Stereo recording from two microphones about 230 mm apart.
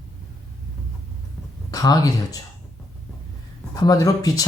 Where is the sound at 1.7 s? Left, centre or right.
Centre.